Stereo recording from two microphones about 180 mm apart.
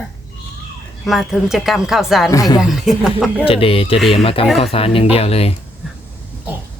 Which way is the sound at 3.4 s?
30° left (ahead or behind).